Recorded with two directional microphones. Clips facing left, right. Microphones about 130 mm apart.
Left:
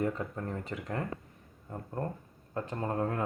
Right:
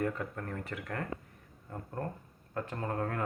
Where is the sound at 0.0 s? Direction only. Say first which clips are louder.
Left 2 dB; 20° left (ahead or behind).